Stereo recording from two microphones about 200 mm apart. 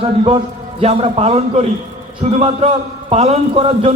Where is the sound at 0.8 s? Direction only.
30° right (ahead or behind).